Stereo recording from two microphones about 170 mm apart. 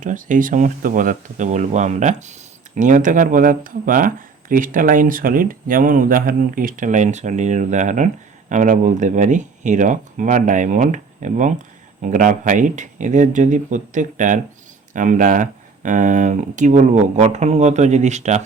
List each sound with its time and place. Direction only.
0.0 s speech: 50° right (ahead or behind)